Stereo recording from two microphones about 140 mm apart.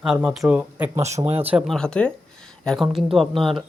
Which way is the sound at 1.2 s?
45° right (ahead or behind).